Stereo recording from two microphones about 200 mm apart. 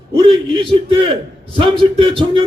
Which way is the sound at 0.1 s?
25° right (ahead or behind).